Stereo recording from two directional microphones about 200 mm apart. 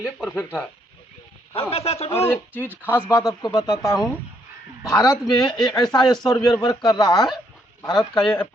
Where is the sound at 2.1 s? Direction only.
10° left (ahead or behind).